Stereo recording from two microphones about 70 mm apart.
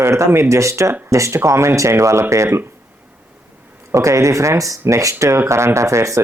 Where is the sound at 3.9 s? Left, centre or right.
Right.